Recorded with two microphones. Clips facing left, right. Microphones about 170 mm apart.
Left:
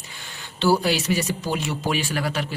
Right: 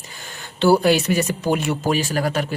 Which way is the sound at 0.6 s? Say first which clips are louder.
Right 5 dB; 55° right (ahead or behind).